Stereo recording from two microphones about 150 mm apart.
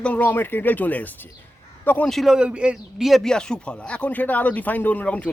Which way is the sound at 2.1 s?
Centre (ahead or behind).